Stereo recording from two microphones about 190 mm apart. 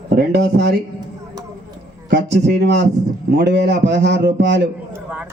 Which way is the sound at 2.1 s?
60° right (ahead or behind).